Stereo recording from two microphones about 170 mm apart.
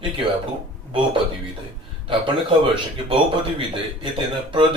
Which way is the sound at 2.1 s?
30° right (ahead or behind).